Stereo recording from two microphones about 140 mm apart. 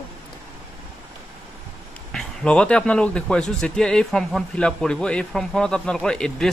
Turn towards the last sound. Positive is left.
turn(degrees=5)  # may be behind; listen again after turning